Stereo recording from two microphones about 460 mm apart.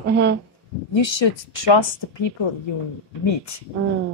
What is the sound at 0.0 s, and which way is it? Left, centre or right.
Speech, right.